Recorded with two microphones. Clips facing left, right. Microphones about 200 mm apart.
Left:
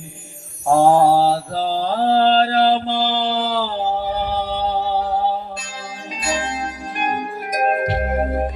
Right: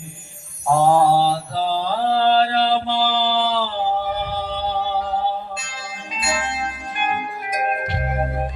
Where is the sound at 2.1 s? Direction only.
40° left (ahead or behind).